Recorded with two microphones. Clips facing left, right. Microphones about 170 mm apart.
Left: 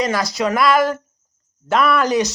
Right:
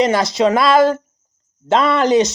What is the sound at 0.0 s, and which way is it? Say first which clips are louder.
Speech: right 5 dB; 25° right (ahead or behind).